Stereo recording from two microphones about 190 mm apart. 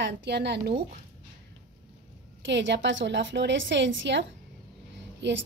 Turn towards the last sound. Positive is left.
turn(degrees=-65)  # may be behind; listen again after turning